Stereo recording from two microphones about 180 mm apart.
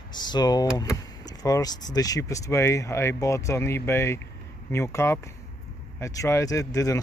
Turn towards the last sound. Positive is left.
turn(degrees=20)  # may be behind; listen again after turning